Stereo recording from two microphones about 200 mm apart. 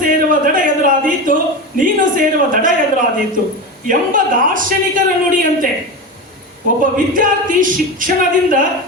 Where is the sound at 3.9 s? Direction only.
40° right (ahead or behind).